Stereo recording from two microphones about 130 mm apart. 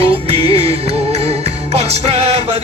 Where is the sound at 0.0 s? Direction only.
50° right (ahead or behind).